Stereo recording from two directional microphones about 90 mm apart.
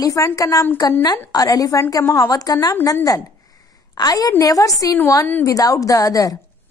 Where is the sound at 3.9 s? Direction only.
45° left (ahead or behind).